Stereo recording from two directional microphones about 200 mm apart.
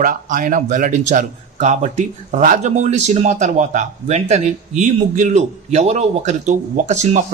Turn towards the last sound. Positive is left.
turn(degrees=-35)  # may be behind; listen again after turning